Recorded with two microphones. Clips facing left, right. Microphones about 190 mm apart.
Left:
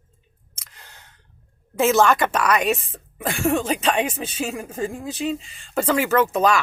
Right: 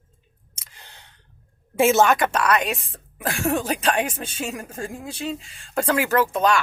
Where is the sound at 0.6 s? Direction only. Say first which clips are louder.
Even; 30° right (ahead or behind).